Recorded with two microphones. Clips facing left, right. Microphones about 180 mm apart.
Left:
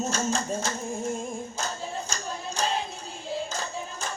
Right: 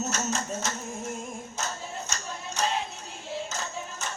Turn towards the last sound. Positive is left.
turn(degrees=30)  # may be behind; listen again after turning